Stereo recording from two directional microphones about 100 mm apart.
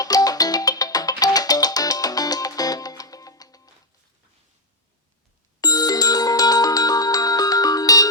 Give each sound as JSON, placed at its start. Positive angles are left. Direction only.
{"t": 0.0, "sound": "music", "side_deg": 40}
{"t": 5.5, "sound": "music", "side_deg": 40}